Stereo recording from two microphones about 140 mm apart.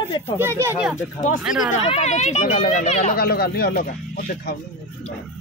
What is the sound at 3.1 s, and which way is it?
Speech, 90° left.